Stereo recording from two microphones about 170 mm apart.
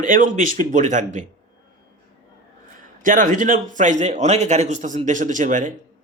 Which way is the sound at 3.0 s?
50° right (ahead or behind).